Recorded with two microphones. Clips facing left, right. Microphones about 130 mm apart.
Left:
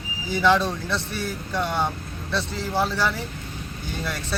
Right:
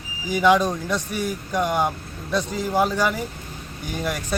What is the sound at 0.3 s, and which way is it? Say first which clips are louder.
Speech: right 3 dB; 10° right (ahead or behind).